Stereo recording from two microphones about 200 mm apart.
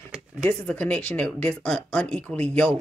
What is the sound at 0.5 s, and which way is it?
Speech, 5° left (ahead or behind).